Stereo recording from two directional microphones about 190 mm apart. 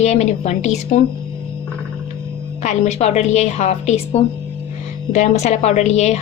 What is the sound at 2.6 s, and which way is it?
Speech, 35° left (ahead or behind).